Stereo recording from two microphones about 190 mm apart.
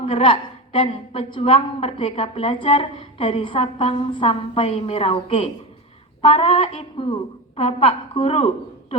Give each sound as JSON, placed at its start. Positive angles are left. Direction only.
{"t": 0.0, "sound": "a woman's voice", "side_deg": 25}